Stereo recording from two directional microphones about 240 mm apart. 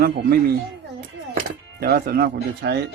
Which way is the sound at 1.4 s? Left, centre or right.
Right.